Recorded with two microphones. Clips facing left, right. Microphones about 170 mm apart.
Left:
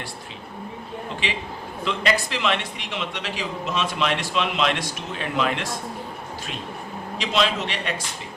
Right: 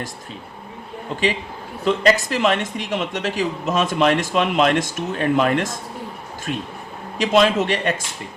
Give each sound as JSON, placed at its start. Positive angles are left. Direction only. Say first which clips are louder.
{"t": 1.8, "sound": "a man's voice", "louder": "right 7 dB", "side_deg": -45}
{"t": 7.2, "sound": "a man's voice", "louder": "right 7 dB", "side_deg": -50}